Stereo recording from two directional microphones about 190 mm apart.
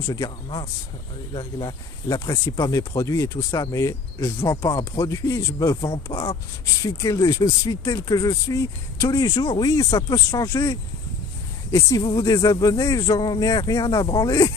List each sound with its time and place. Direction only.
0.0 s speech: 20° left (ahead or behind)